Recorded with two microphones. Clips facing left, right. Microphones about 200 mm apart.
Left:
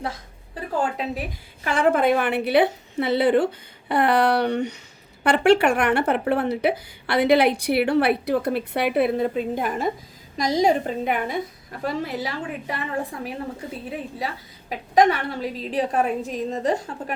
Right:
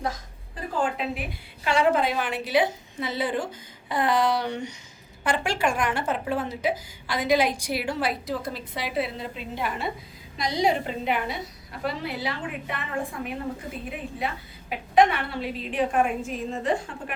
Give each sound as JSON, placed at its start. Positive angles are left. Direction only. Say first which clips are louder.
{"t": 1.6, "sound": "a woman's voice", "louder": "left 3 dB", "side_deg": 50}